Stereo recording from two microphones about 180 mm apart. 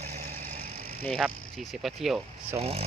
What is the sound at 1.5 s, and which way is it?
Speech, centre (ahead or behind).